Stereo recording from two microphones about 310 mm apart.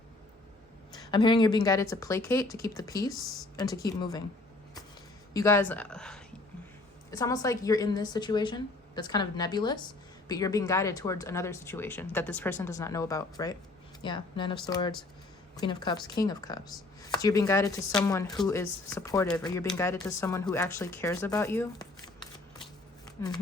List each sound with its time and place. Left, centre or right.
0.9 s a woman's voice: centre
3.2 s speech: centre
3.6 s a woman's voice: centre
5.3 s a woman's voice: centre